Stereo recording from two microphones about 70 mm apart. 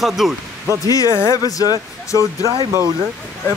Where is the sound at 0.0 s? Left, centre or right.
Centre.